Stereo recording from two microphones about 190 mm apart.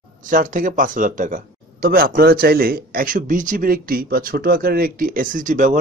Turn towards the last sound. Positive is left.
turn(degrees=-40)  # may be behind; listen again after turning